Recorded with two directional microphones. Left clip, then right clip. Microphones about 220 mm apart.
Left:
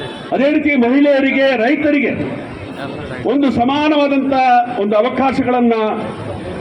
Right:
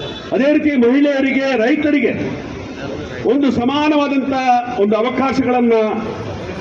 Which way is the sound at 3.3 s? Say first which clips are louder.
Left 1 dB; 40° left (ahead or behind).